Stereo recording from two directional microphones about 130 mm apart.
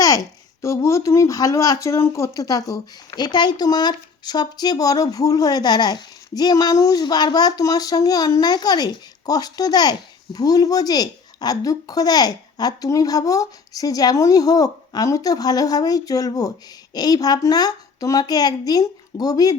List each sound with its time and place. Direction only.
0.6 s speech: 25° left (ahead or behind)